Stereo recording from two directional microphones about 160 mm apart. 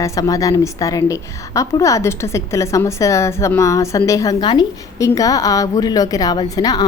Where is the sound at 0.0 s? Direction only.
20° left (ahead or behind).